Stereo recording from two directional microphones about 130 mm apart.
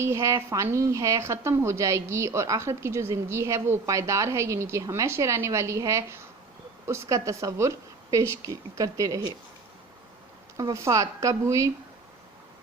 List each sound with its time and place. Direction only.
0.0 s a woman's voice: 25° right (ahead or behind)
10.6 s a woman's voice: 25° right (ahead or behind)